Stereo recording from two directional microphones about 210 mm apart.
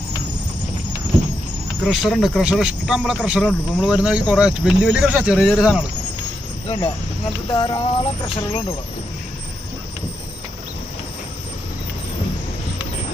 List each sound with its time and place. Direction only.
1.8 s speech: centre (ahead or behind)
6.7 s speech: 30° left (ahead or behind)